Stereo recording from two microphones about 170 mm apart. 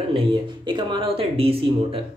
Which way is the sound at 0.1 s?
30° right (ahead or behind).